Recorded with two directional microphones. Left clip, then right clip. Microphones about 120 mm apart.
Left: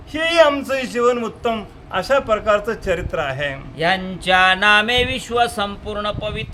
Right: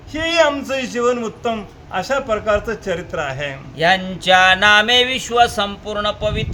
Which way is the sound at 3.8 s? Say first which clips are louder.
Right 4 dB; 25° right (ahead or behind).